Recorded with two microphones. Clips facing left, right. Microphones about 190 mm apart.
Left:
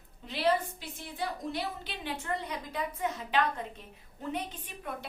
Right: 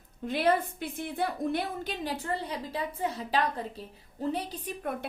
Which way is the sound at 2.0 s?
35° right (ahead or behind).